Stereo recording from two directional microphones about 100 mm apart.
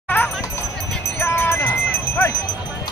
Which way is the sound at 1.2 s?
25° left (ahead or behind).